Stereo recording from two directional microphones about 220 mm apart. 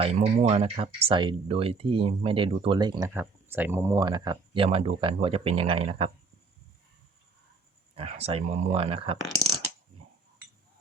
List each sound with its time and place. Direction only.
0.0 s speech: 25° right (ahead or behind)
7.9 s speech: 25° right (ahead or behind)